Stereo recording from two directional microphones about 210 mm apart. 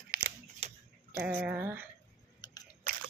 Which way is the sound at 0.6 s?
30° right (ahead or behind).